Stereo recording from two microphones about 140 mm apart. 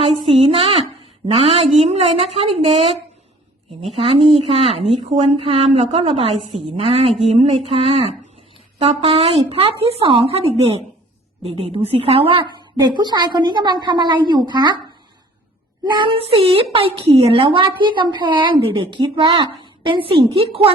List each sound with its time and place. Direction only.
0.0 s a woman's voice: 40° right (ahead or behind)
3.9 s a woman's voice: 45° right (ahead or behind)
12.8 s a woman's voice: 30° right (ahead or behind)
15.8 s a woman's voice: 35° right (ahead or behind)